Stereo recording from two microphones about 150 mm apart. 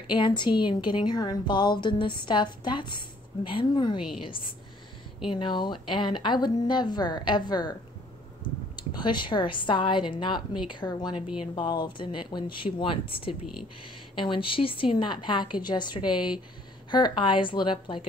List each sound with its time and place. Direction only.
0.1 s a woman's voice: 30° left (ahead or behind)
5.3 s speech: 30° left (ahead or behind)
8.7 s a woman's voice: 30° left (ahead or behind)